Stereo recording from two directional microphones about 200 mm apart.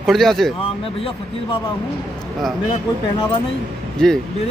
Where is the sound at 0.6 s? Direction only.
25° left (ahead or behind).